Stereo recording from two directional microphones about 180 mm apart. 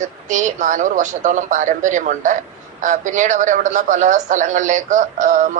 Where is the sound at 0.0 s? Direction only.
45° right (ahead or behind).